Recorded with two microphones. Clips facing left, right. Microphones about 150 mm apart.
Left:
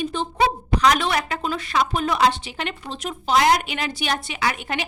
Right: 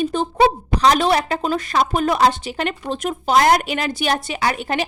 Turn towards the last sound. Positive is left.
turn(degrees=-35)  # may be behind; listen again after turning